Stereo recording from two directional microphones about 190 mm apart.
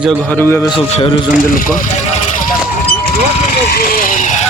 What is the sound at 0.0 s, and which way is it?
Speech, centre (ahead or behind).